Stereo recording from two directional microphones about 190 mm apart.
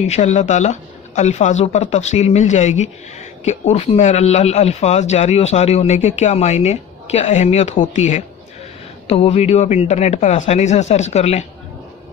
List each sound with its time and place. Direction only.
0.0 s speech: 35° left (ahead or behind)